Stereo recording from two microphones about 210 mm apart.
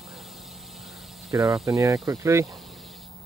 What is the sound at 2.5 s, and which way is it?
Insect, centre (ahead or behind).